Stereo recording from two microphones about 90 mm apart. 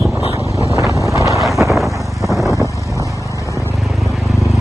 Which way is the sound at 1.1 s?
35° right (ahead or behind).